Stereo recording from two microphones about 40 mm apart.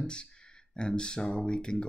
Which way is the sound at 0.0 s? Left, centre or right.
Left.